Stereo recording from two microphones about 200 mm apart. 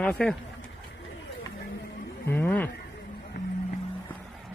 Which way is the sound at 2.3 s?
10° left (ahead or behind).